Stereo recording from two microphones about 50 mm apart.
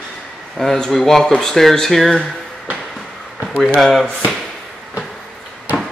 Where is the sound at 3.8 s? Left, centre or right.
Centre.